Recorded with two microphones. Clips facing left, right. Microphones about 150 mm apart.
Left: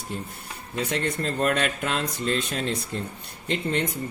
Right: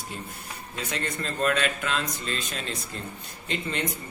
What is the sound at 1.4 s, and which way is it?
A man's voice, 55° left (ahead or behind).